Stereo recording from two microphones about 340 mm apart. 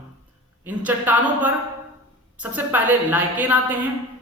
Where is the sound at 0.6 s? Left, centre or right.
Centre.